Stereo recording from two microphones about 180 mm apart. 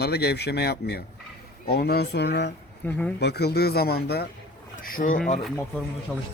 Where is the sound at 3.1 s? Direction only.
65° left (ahead or behind).